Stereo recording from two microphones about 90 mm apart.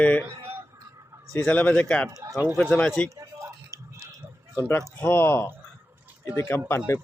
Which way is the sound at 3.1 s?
35° right (ahead or behind).